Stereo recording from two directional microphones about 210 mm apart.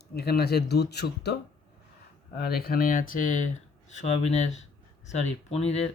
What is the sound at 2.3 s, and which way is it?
Speech, 50° left (ahead or behind).